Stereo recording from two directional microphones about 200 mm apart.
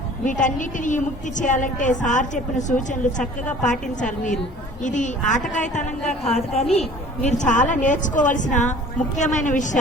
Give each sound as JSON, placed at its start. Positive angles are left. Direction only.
{"t": 0.3, "sound": "a woman's voice", "side_deg": 40}